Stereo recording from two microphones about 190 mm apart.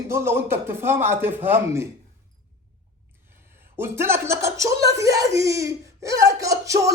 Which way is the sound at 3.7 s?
10° right (ahead or behind).